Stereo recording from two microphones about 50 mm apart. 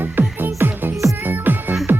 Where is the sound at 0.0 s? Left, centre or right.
Right.